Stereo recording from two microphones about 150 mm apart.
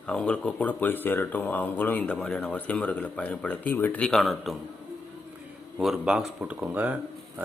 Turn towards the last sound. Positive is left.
turn(degrees=-10)  # may be behind; listen again after turning